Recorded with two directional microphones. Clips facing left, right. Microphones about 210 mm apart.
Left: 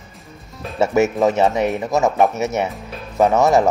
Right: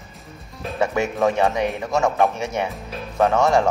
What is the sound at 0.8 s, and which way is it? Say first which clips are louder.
Speech: left 5 dB; 20° left (ahead or behind).